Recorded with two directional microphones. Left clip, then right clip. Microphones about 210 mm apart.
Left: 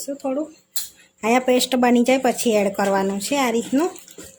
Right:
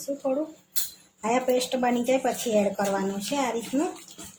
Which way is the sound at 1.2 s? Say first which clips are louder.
Left 6 dB; 40° left (ahead or behind).